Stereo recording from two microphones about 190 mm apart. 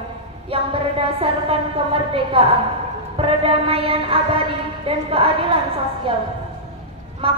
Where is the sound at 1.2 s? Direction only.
30° right (ahead or behind).